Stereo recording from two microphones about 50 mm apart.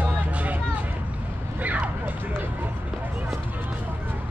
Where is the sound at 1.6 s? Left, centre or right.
Right.